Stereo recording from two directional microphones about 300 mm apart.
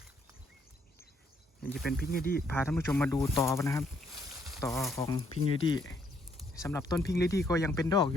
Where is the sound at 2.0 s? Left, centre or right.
Left.